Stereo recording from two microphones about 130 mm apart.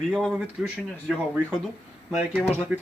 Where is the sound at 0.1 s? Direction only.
5° right (ahead or behind).